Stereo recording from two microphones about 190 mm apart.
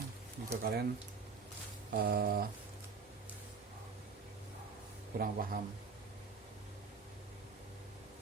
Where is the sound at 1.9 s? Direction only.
50° right (ahead or behind).